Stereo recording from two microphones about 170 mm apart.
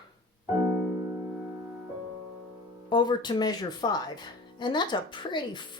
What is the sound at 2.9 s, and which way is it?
Speech, 25° left (ahead or behind).